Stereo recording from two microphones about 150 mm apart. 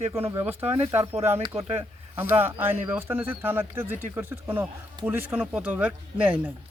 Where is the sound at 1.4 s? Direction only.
40° right (ahead or behind).